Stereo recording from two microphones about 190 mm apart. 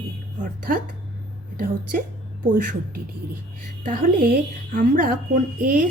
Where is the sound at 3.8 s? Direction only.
50° right (ahead or behind).